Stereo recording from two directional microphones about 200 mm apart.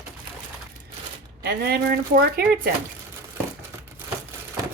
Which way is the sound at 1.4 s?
50° right (ahead or behind).